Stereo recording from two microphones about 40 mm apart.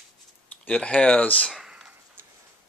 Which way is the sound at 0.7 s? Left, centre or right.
Left.